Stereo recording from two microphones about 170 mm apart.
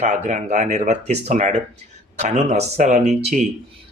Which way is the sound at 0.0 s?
45° right (ahead or behind).